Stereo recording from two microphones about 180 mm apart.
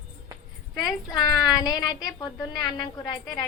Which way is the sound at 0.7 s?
20° left (ahead or behind).